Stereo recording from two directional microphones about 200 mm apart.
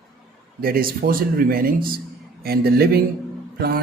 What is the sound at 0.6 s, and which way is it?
A man's voice, 45° right (ahead or behind).